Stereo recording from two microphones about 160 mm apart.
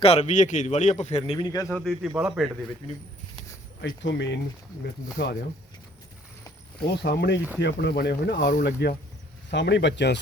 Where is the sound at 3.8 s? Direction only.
90° left.